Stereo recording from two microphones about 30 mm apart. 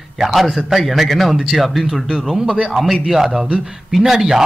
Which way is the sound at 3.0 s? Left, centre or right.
Centre.